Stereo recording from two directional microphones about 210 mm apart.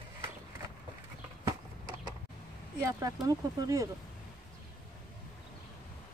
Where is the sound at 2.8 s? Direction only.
15° right (ahead or behind).